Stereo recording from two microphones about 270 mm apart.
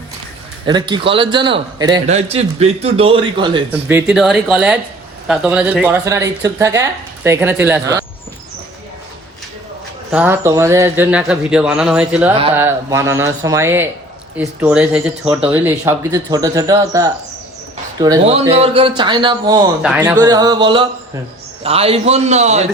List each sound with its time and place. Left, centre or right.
0.6 s a man's voice: centre
3.7 s speech: centre
10.1 s a man's voice: centre; by 22.6 s right